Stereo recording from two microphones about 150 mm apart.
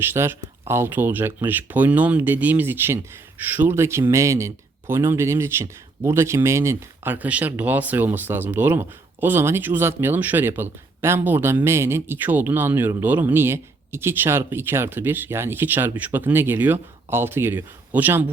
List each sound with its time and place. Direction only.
0.0 s speech: 15° right (ahead or behind)